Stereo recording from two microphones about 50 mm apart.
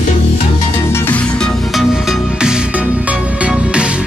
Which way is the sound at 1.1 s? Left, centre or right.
Centre.